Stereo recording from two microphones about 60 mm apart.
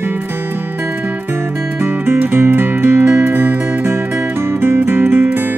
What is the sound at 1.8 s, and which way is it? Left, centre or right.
Music, right.